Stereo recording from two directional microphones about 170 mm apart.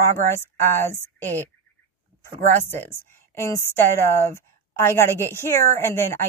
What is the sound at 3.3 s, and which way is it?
Speech, 15° left (ahead or behind).